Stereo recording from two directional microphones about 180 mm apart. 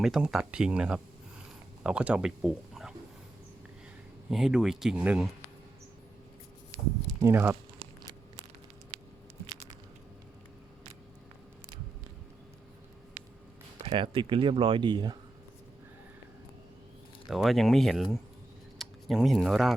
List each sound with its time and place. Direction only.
0.0 s speech: centre (ahead or behind)
4.3 s speech: centre (ahead or behind)
7.2 s speech: 15° right (ahead or behind)
13.8 s speech: 30° right (ahead or behind)
17.2 s speech: centre (ahead or behind)